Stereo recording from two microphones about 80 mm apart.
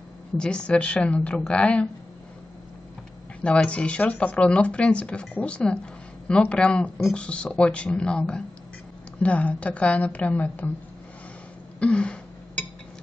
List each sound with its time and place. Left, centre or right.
0.4 s speech: centre
3.4 s speech: centre
11.8 s a sound: centre